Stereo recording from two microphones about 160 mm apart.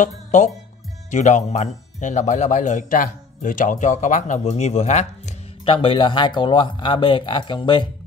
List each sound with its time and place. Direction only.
0.0 s speech: 50° left (ahead or behind); by 7.9 s 30° left (ahead or behind)